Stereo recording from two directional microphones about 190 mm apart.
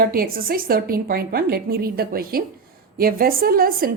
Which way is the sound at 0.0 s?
50° right (ahead or behind).